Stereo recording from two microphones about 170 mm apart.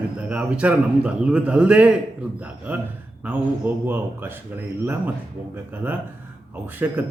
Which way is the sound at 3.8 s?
10° right (ahead or behind).